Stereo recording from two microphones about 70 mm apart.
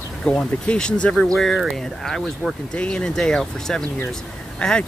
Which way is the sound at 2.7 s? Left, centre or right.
Centre.